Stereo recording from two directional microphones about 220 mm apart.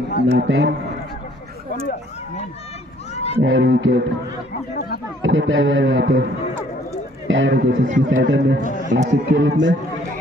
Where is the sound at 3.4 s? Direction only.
55° right (ahead or behind).